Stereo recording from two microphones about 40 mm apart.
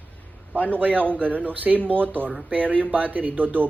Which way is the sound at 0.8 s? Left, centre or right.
Right.